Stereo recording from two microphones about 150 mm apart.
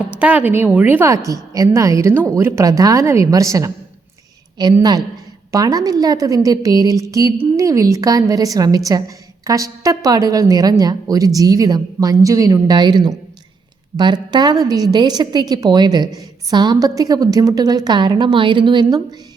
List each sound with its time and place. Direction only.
0.2 s a woman's voice: 10° right (ahead or behind)
4.8 s a woman's voice: 25° right (ahead or behind)